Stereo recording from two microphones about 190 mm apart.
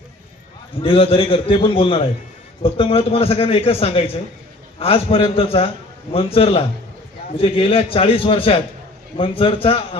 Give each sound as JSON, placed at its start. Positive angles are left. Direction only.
{"t": 0.8, "sound": "a man's voice", "side_deg": 30}